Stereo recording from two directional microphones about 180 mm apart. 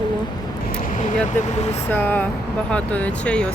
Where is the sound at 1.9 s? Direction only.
10° left (ahead or behind).